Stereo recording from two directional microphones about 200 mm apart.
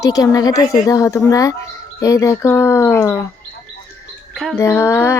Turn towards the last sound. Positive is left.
turn(degrees=10)  # may be behind; listen again after turning